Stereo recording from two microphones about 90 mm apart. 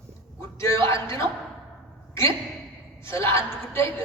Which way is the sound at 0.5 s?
30° left (ahead or behind).